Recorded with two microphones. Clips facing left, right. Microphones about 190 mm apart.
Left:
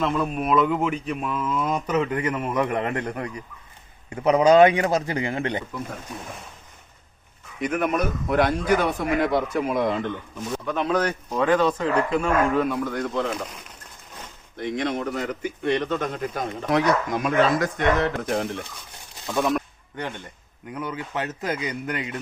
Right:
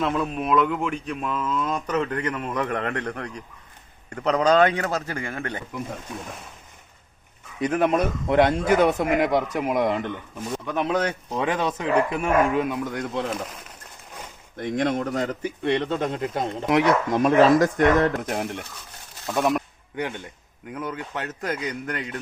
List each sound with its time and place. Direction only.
0.0 s speech: centre (ahead or behind); by 5.6 s 20° left (ahead or behind)
7.6 s speech: 30° right (ahead or behind)
14.5 s speech: 50° right (ahead or behind)
18.3 s speech: 15° right (ahead or behind)
19.4 s a sound: 15° right (ahead or behind)
20.7 s speech: centre (ahead or behind)